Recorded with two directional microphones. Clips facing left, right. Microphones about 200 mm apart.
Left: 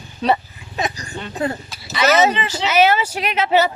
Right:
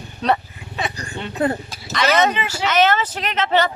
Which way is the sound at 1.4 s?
55° right (ahead or behind).